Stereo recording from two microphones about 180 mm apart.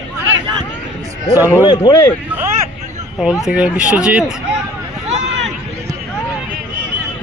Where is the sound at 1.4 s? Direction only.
15° left (ahead or behind).